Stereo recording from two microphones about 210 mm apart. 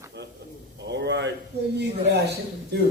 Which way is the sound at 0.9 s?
55° right (ahead or behind).